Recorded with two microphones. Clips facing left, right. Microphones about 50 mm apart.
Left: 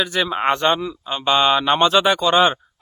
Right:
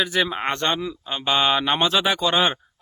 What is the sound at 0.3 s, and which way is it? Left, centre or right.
Speech, centre.